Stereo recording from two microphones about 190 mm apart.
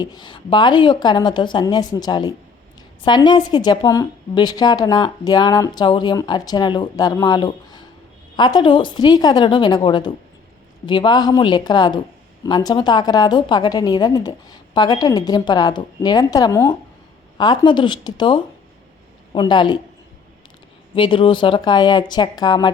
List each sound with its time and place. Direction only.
0.0 s a woman's voice: 20° left (ahead or behind)
20.9 s a woman's voice: 25° left (ahead or behind)